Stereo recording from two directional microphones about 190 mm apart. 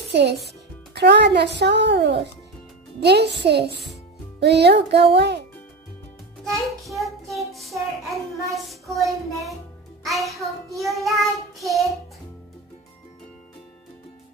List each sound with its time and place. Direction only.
0.1 s a child's voice: 60° right (ahead or behind)
6.5 s child singing: centre (ahead or behind)